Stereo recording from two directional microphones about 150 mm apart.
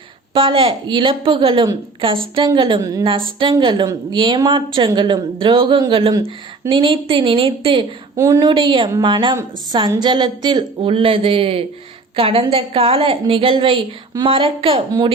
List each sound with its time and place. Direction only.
0.3 s speech: 35° right (ahead or behind)
8.1 s speech: 20° right (ahead or behind); by 14.8 s 35° right (ahead or behind)